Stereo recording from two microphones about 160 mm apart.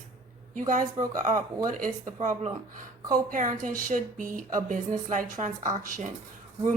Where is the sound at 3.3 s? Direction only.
55° right (ahead or behind).